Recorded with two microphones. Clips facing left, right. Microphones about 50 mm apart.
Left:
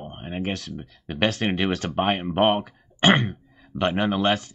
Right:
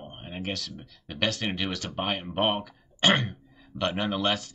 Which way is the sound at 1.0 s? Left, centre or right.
Left.